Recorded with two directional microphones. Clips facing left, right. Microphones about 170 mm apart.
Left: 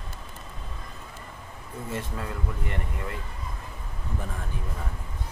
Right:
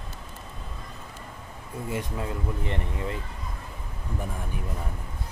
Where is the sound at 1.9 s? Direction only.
15° right (ahead or behind).